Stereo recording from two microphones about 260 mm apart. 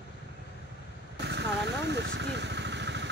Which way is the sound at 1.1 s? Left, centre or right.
Right.